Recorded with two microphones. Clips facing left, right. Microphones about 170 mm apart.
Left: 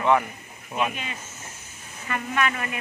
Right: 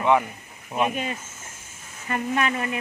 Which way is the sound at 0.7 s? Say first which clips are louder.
Right 3 dB; 40° right (ahead or behind).